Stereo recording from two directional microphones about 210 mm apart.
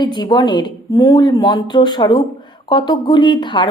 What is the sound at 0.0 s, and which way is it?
A woman's voice, 20° left (ahead or behind).